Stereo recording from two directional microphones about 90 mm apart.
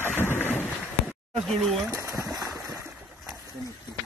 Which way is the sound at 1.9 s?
30° right (ahead or behind).